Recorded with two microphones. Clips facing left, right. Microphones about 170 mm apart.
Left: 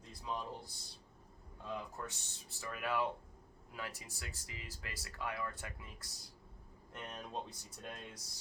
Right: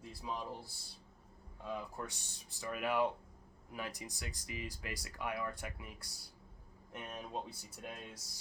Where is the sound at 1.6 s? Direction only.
15° right (ahead or behind).